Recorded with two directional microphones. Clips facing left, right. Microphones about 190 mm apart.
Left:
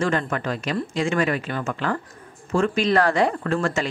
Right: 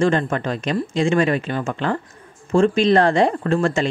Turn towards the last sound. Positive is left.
turn(degrees=-25)  # may be behind; listen again after turning